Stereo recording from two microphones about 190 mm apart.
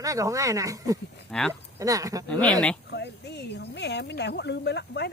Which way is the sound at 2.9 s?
65° left (ahead or behind).